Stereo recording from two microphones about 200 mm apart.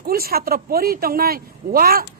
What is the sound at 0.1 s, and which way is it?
A woman's voice, 50° right (ahead or behind).